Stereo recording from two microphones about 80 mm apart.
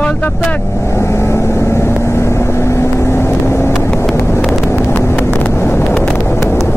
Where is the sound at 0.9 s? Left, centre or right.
Left.